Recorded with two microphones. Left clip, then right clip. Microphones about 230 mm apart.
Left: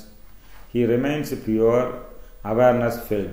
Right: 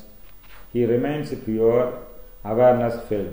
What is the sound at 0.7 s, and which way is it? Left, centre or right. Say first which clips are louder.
Speech: even; left.